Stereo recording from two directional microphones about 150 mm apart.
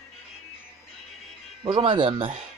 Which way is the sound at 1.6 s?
30° right (ahead or behind).